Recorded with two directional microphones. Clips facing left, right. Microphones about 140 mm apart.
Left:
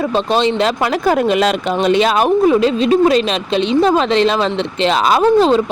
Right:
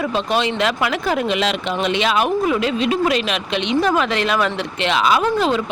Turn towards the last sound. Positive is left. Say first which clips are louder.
# left 6 dB
turn(degrees=30)  # may be behind; listen again after turning